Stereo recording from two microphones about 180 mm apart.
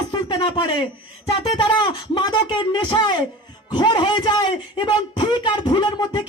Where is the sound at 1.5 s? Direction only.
25° left (ahead or behind).